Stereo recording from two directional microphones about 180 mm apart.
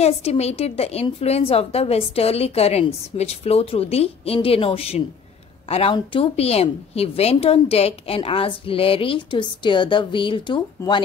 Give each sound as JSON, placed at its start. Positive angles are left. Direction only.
{"t": 0.0, "sound": "a woman's voice", "side_deg": 35}